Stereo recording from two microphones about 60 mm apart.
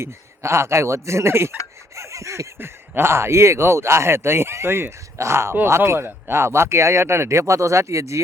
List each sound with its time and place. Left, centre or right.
0.0 s speech: right
2.0 s a sound: right
2.6 s speech: right